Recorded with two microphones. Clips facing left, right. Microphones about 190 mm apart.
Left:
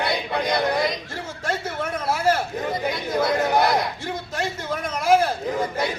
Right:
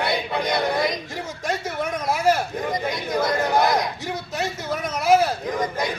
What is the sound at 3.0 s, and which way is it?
Chatter, centre (ahead or behind).